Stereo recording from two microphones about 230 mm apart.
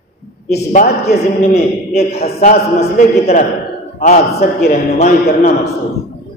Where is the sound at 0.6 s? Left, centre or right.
Left.